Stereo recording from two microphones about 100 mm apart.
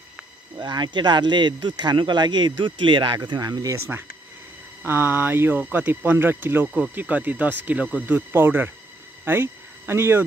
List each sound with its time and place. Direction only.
0.6 s speech: 45° right (ahead or behind)
4.8 s speech: 20° right (ahead or behind)